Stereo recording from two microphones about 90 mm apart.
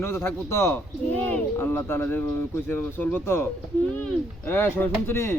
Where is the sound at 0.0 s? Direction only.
25° left (ahead or behind).